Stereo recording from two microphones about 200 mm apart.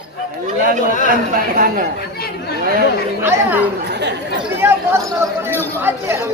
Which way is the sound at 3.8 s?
60° right (ahead or behind).